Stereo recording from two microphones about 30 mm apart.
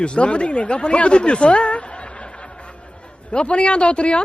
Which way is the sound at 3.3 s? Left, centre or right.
Left.